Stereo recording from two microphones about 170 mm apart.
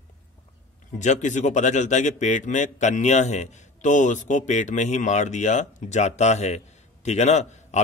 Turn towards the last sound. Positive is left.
turn(degrees=40)  # may be behind; listen again after turning